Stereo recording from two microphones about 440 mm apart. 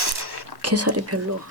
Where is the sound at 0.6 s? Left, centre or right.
Right.